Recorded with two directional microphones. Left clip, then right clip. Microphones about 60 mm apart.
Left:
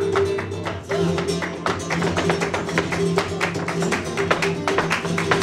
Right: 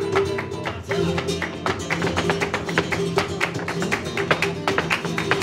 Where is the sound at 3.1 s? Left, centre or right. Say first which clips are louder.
Left 1 dB; left.